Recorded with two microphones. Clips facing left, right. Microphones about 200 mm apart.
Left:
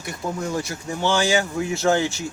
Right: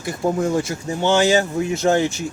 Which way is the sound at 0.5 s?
20° right (ahead or behind).